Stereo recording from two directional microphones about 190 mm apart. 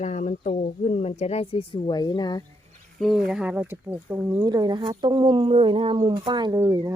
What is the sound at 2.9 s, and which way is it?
Speech, centre (ahead or behind).